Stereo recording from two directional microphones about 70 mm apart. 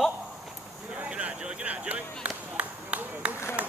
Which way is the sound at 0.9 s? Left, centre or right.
Centre.